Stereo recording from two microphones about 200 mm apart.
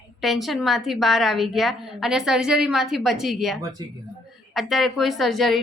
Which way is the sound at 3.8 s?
20° right (ahead or behind).